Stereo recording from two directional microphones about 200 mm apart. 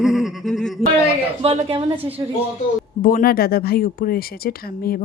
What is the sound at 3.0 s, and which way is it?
Speech, 45° left (ahead or behind).